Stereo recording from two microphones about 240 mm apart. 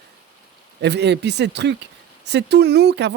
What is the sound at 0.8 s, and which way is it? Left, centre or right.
A man's voice, right.